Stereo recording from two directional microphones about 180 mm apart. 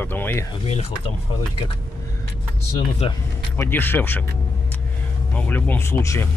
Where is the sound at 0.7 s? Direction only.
35° left (ahead or behind).